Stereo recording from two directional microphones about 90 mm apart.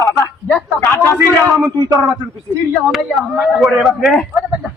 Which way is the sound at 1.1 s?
35° right (ahead or behind).